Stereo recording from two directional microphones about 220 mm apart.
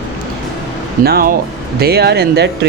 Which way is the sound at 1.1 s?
45° right (ahead or behind).